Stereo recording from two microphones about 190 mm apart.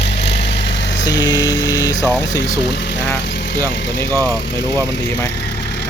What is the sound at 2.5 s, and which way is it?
Speech, 65° left (ahead or behind).